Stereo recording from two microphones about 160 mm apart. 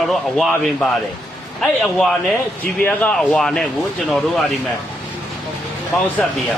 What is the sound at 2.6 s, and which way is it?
Speech, 10° left (ahead or behind).